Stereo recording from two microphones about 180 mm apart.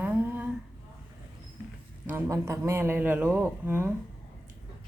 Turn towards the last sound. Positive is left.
turn(degrees=-10)  # may be behind; listen again after turning